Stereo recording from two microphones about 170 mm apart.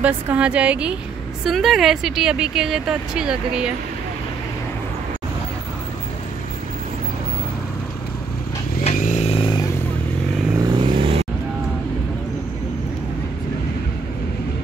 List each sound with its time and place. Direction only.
0.0 s a woman's voice: 5° right (ahead or behind)
8.8 s vehicle: 45° left (ahead or behind)
9.3 s vehicle: 30° left (ahead or behind)
10.7 s vehicle: 25° right (ahead or behind)